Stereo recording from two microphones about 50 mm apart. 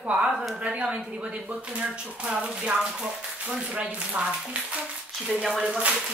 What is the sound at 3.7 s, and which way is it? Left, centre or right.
Speech, right.